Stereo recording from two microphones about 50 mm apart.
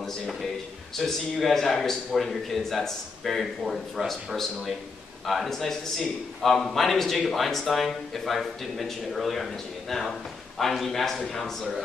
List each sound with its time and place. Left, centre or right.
0.0 s a man's voice: centre